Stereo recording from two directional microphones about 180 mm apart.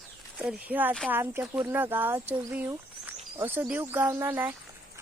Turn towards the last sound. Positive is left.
turn(degrees=-10)  # may be behind; listen again after turning